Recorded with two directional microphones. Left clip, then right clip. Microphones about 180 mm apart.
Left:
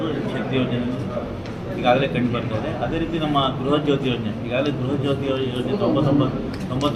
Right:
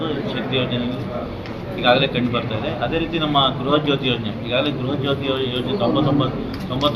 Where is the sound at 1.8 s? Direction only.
15° left (ahead or behind).